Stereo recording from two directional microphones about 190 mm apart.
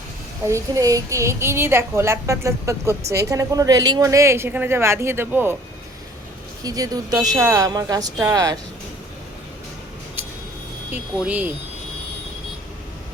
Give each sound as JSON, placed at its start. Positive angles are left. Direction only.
{"t": 0.4, "sound": "a woman's voice", "side_deg": -15}
{"t": 6.6, "sound": "speech", "side_deg": -20}
{"t": 10.9, "sound": "a woman's voice", "side_deg": -10}